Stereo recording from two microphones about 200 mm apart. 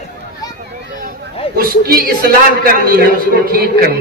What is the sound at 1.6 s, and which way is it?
A man's voice, 50° right (ahead or behind).